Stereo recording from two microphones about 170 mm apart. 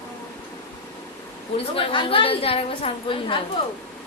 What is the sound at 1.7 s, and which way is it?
A woman's voice, 30° left (ahead or behind).